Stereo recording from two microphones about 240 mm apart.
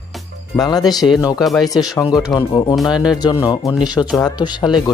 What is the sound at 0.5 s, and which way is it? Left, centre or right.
Speech, centre.